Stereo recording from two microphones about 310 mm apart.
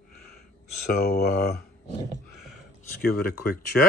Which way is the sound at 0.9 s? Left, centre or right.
Left.